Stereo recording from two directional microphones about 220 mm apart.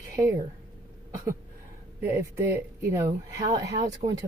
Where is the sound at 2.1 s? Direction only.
10° right (ahead or behind); by 4.2 s 25° right (ahead or behind).